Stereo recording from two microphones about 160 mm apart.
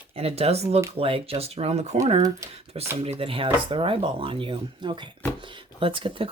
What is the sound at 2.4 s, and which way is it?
Speech, 20° right (ahead or behind).